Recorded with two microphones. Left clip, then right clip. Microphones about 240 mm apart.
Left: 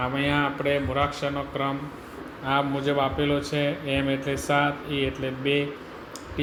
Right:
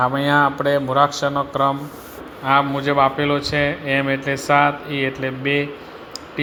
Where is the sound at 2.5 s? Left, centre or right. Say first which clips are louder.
Right 7 dB; centre.